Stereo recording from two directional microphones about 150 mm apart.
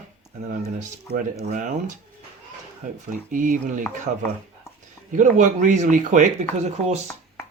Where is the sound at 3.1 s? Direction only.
60° right (ahead or behind).